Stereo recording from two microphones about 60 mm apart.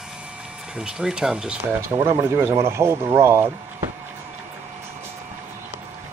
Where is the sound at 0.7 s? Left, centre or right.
Centre.